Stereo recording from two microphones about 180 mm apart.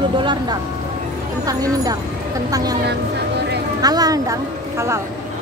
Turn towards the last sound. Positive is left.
turn(degrees=-20)  # may be behind; listen again after turning